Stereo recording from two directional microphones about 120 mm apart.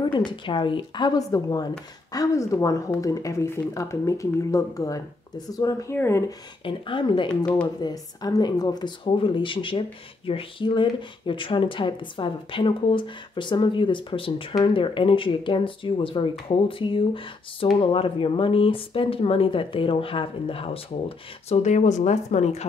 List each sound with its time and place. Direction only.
0.0 s a woman's voice: 40° left (ahead or behind); by 6.3 s 25° left (ahead or behind)
6.6 s a woman's voice: 45° left (ahead or behind)
21.5 s speech: 80° left